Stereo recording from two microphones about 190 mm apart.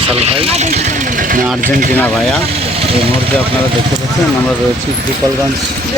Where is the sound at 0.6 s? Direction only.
40° right (ahead or behind).